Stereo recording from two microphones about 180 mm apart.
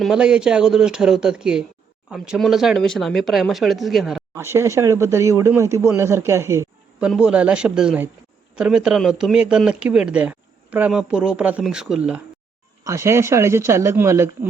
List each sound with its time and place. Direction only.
0.0 s speech: 5° right (ahead or behind)
4.4 s speech: 15° right (ahead or behind)
12.8 s speech: 15° right (ahead or behind)